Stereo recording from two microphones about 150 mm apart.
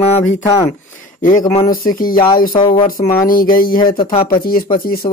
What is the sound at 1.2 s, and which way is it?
Speech, 65° left (ahead or behind).